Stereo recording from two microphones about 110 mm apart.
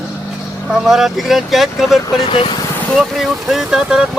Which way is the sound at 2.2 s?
50° left (ahead or behind).